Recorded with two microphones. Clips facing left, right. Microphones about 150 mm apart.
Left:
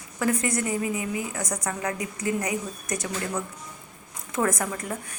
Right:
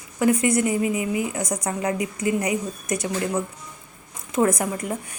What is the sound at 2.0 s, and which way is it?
Speech, 15° right (ahead or behind).